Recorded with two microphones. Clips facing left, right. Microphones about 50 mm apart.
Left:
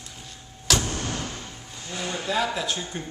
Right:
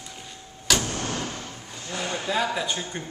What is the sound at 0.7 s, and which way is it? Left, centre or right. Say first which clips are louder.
Vehicle: even; centre.